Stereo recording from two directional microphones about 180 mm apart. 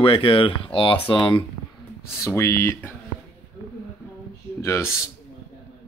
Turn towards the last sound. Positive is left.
turn(degrees=15)  # may be behind; listen again after turning